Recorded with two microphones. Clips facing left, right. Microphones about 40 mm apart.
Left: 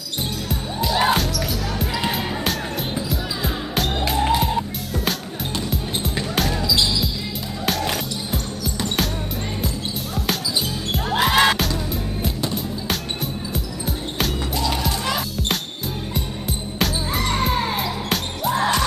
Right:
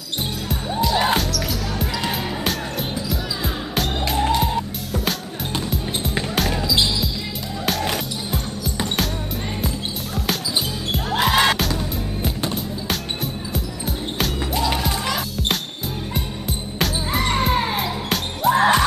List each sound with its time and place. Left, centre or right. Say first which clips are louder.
0.5 s music: right 3 dB; centre
3.1 s music: even; centre
6.5 s basketball bounce: right 1 dB; centre
7.6 s music: even; centre
10.9 s music: even; centre
12.8 s music: even; centre
14.6 s music: right 2 dB; centre
15.0 s music: even; centre
17.2 s music: right 2 dB; centre
18.5 s music: right 5 dB; right